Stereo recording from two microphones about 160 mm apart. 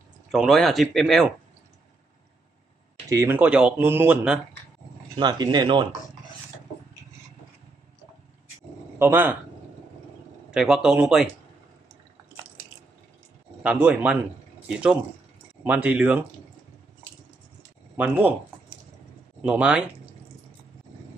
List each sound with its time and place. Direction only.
0.3 s speech: centre (ahead or behind)
3.1 s speech: 15° right (ahead or behind)
5.2 s speech: 25° right (ahead or behind)
8.9 s speech: 15° right (ahead or behind)
10.5 s speech: 5° right (ahead or behind)
13.6 s speech: 10° right (ahead or behind)
17.9 s speech: 10° right (ahead or behind)
19.4 s speech: 5° right (ahead or behind)